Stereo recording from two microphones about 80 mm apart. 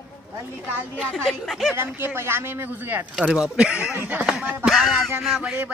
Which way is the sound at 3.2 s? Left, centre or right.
Centre.